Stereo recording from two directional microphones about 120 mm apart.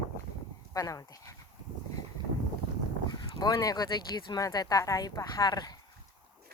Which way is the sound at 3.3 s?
35° left (ahead or behind).